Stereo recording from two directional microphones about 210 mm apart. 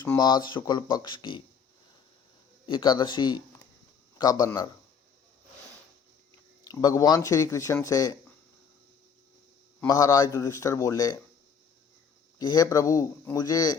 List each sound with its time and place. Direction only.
0.0 s speech: 20° left (ahead or behind)
2.6 s speech: 20° left (ahead or behind)
6.7 s speech: 15° left (ahead or behind)
9.8 s speech: 15° left (ahead or behind)
12.4 s speech: 20° left (ahead or behind)